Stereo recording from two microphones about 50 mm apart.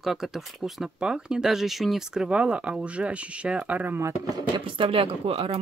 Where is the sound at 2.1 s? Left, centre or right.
Centre.